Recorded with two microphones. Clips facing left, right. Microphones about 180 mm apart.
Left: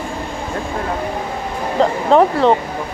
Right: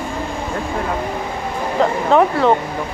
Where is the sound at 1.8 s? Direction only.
30° left (ahead or behind).